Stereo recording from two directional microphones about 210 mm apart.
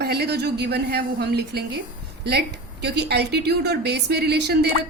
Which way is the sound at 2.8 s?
50° right (ahead or behind).